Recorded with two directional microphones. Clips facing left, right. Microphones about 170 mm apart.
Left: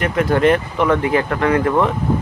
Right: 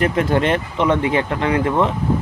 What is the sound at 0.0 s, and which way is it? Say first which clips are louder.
Speech: left 2 dB; 30° right (ahead or behind).